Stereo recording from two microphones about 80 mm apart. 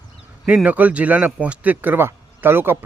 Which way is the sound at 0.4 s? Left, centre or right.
Centre.